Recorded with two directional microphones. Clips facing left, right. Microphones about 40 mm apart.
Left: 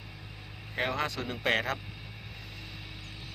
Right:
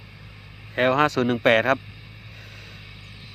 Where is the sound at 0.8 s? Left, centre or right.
Right.